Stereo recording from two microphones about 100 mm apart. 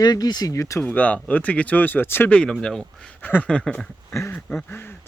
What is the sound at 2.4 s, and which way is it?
Speech, 5° left (ahead or behind).